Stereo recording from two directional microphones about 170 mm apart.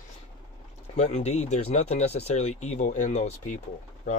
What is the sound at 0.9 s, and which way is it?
Speech, 40° left (ahead or behind).